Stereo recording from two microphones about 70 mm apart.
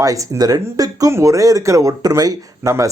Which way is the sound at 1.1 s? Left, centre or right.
Right.